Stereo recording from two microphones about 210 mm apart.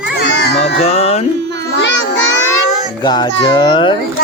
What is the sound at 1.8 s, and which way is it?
Child singing, 55° left (ahead or behind).